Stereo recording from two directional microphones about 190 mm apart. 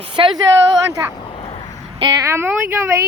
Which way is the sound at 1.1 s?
30° left (ahead or behind).